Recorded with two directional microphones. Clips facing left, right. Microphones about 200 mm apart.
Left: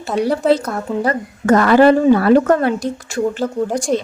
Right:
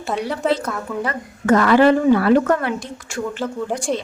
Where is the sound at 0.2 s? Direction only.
40° left (ahead or behind).